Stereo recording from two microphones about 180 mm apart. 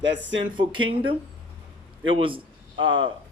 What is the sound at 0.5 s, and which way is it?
Speech, 25° right (ahead or behind).